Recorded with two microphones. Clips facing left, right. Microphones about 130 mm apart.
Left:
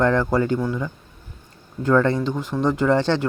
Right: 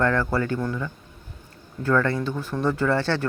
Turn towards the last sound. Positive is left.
turn(degrees=20)  # may be behind; listen again after turning